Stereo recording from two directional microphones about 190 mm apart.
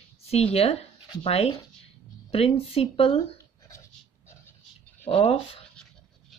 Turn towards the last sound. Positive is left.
turn(degrees=30)  # may be behind; listen again after turning